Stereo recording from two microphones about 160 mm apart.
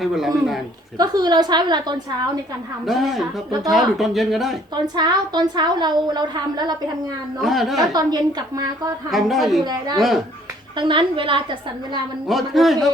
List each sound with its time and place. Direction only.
0.0 s speech: centre (ahead or behind)
0.9 s a woman's voice: 25° right (ahead or behind)
2.8 s speech: centre (ahead or behind)
4.7 s a woman's voice: 25° right (ahead or behind)
7.4 s speech: centre (ahead or behind)
7.9 s a woman's voice: 25° right (ahead or behind)
9.0 s speech: centre (ahead or behind)
9.6 s a woman's voice: 25° right (ahead or behind)
12.3 s speech: centre (ahead or behind)